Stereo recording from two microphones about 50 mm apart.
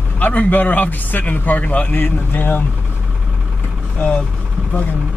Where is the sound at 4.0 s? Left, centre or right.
Left.